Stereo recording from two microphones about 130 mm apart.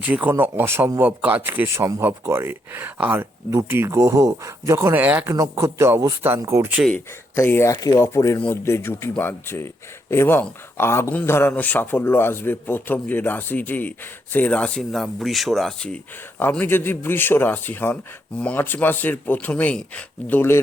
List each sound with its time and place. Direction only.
0.0 s speech: 10° right (ahead or behind)
5.3 s speech: 25° right (ahead or behind)
6.9 s a man's voice: 15° left (ahead or behind)
16.4 s a man's voice: 15° left (ahead or behind)